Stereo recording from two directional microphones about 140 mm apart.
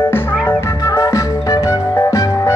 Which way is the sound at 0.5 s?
20° left (ahead or behind).